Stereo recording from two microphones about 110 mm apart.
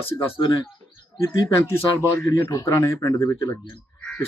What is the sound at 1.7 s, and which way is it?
Speech, 20° left (ahead or behind).